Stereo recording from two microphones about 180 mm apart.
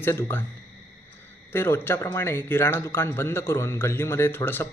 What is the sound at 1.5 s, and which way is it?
A man's voice, 10° left (ahead or behind).